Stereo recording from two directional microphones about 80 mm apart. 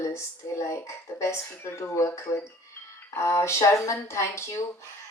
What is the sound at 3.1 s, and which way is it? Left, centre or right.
Speech, left.